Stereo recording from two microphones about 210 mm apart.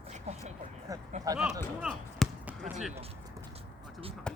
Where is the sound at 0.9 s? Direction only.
15° right (ahead or behind).